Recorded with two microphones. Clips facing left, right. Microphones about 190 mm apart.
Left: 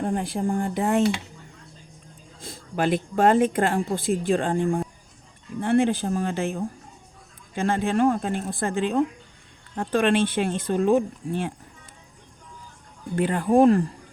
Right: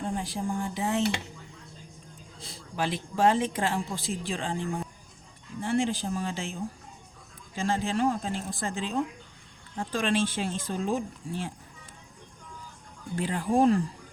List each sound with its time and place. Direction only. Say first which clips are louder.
0.0 s speech: left 6 dB; 55° left (ahead or behind)
2.4 s speech: left 6 dB; 55° left (ahead or behind)
13.1 s speech: left 6 dB; 60° left (ahead or behind)